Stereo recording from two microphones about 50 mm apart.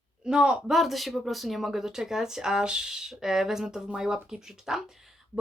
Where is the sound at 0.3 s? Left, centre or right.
Centre.